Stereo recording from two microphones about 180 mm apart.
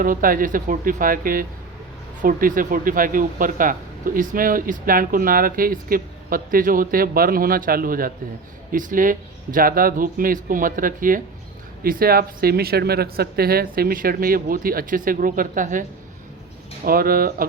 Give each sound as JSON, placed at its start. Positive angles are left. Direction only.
{"t": 0.0, "sound": "speech", "side_deg": -50}